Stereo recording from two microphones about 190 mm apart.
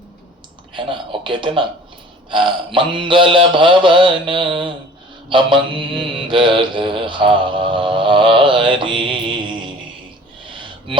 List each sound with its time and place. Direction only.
0.7 s mantra: 25° right (ahead or behind)